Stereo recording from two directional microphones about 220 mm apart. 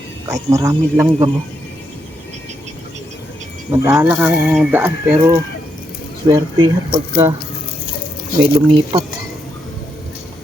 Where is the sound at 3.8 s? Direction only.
10° right (ahead or behind).